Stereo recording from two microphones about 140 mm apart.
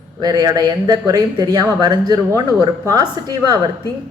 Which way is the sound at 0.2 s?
25° right (ahead or behind).